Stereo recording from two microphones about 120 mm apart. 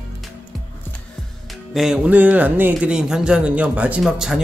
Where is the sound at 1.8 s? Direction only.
10° right (ahead or behind).